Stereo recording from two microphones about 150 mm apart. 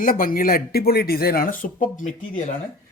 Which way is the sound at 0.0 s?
65° left (ahead or behind).